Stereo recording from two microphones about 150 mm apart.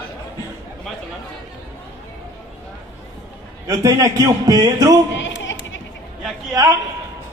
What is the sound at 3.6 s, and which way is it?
A man's voice, 20° right (ahead or behind).